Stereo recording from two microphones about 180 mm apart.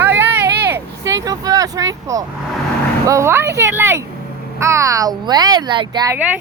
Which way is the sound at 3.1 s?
15° right (ahead or behind).